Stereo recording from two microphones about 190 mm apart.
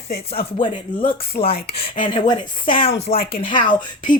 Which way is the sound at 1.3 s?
50° left (ahead or behind).